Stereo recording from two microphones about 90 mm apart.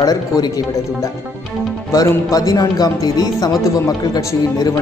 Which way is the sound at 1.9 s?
35° left (ahead or behind).